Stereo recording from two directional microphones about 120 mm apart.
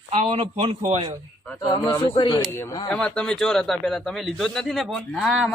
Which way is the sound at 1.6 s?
40° left (ahead or behind).